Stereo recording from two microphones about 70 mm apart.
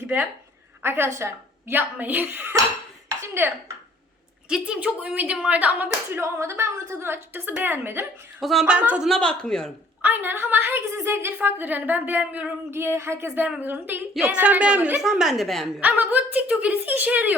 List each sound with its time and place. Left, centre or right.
0.8 s a woman's voice: right
2.0 s speech: right
3.1 s dishes: right
4.4 s speech: centre; by 6.2 s right
6.3 s a woman's voice: right
8.4 s a woman's voice: centre
10.0 s a woman's voice: right
11.4 s speech: right
12.2 s speech: centre
12.7 s a woman's voice: right; by 15.0 s centre
15.0 s a woman's voice: centre
15.8 s speech: right